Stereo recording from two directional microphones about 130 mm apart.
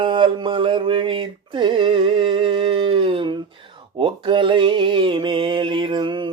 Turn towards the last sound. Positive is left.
turn(degrees=-35)  # may be behind; listen again after turning